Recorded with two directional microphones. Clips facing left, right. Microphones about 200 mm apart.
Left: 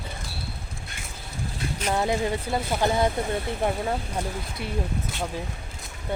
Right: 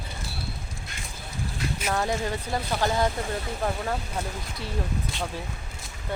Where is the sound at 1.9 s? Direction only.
20° left (ahead or behind).